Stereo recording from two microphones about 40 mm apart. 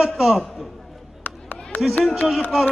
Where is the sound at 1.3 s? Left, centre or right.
Left.